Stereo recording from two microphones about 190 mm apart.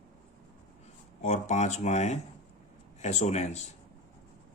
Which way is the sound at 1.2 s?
40° left (ahead or behind).